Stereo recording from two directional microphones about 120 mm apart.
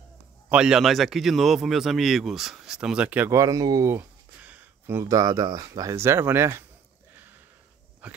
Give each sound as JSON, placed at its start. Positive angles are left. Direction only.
{"t": 0.5, "sound": "a man's voice", "side_deg": -5}
{"t": 3.3, "sound": "speech", "side_deg": -25}
{"t": 3.9, "sound": "speech", "side_deg": -15}
{"t": 8.0, "sound": "dog", "side_deg": -10}